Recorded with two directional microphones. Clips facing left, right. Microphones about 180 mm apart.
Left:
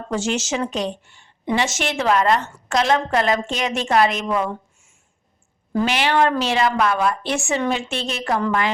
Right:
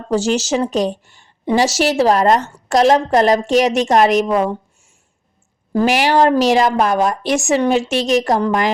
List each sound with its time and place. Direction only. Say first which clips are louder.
0.1 s a woman's voice: right 6 dB; 35° right (ahead or behind)
5.7 s a woman's voice: right 5 dB; 40° right (ahead or behind)